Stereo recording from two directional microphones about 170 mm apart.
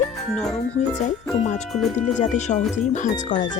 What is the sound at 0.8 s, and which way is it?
A woman's voice, 40° left (ahead or behind).